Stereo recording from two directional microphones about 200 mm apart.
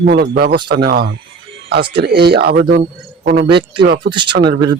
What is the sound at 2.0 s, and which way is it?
Speech, 55° right (ahead or behind).